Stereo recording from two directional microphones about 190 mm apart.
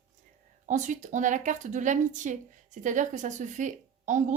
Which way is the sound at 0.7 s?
40° right (ahead or behind).